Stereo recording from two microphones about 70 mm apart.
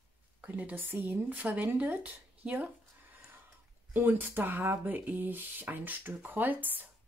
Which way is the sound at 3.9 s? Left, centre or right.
Right.